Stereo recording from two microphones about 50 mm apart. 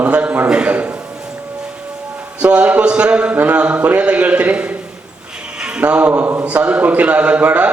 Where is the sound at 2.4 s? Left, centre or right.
Right.